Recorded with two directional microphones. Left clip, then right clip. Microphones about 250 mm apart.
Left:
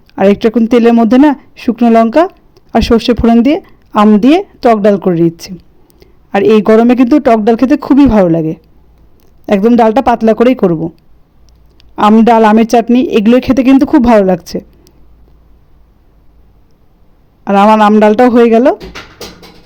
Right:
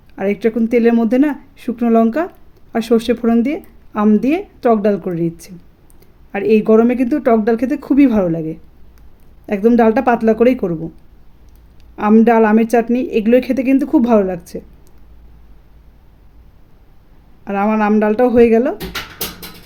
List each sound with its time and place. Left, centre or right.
0.1 s a woman's voice: left
11.9 s a woman's voice: left
17.4 s a woman's voice: left